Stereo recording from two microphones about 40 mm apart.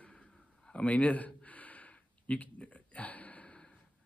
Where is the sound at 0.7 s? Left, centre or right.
Left.